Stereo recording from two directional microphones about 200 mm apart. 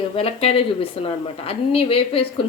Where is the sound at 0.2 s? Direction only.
30° left (ahead or behind).